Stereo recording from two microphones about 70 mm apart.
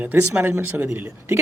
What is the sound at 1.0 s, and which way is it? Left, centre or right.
Speech, right.